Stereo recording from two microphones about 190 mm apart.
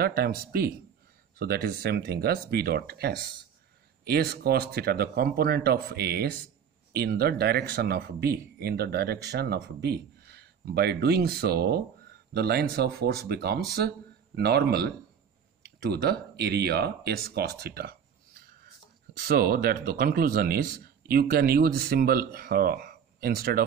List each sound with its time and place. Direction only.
0.0 s speech: 55° right (ahead or behind)
15.9 s speech: 60° right (ahead or behind)